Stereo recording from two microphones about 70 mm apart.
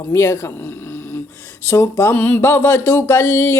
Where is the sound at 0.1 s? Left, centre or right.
Left.